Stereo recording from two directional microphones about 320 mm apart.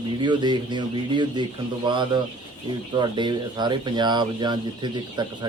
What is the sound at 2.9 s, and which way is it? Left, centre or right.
Speech, centre.